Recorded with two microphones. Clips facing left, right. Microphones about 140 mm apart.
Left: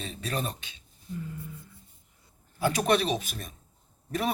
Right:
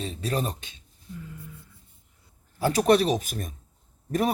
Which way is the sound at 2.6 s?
35° right (ahead or behind).